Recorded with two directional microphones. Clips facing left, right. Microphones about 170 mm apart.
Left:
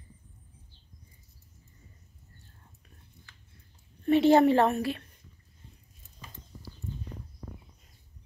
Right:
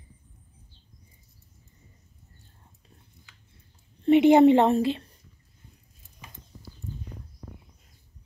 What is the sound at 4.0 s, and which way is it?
Speech, 20° right (ahead or behind).